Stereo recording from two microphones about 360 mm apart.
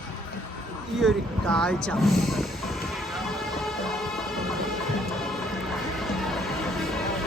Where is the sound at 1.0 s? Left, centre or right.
Centre.